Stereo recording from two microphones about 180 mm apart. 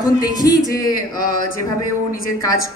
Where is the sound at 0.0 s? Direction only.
20° left (ahead or behind).